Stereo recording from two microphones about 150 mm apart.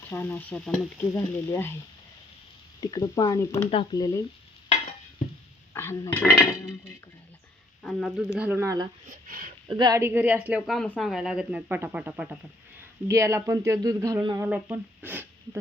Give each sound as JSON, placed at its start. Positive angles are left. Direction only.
{"t": 0.1, "sound": "stir", "side_deg": 15}
{"t": 0.9, "sound": "stir", "side_deg": 15}
{"t": 2.8, "sound": "speech", "side_deg": 25}
{"t": 5.2, "sound": "a sound", "side_deg": 55}
{"t": 5.7, "sound": "speech", "side_deg": 15}
{"t": 7.8, "sound": "speech", "side_deg": 5}
{"t": 8.4, "sound": "speech", "side_deg": -15}
{"t": 9.0, "sound": "speech", "side_deg": -70}
{"t": 9.6, "sound": "speech", "side_deg": -30}
{"t": 10.0, "sound": "speech", "side_deg": -15}
{"t": 10.7, "sound": "speech", "side_deg": 5}